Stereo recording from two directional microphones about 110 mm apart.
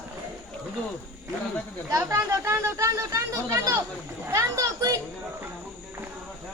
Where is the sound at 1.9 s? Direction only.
25° right (ahead or behind).